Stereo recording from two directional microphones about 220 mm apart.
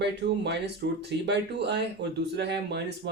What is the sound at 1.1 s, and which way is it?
Speech, 50° right (ahead or behind).